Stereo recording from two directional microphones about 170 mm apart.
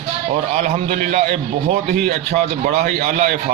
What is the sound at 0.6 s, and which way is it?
Speech, 45° right (ahead or behind).